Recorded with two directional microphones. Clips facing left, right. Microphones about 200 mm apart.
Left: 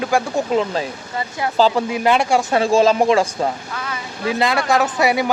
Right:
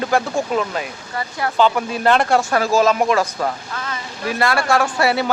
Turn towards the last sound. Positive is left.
turn(degrees=15)  # may be behind; listen again after turning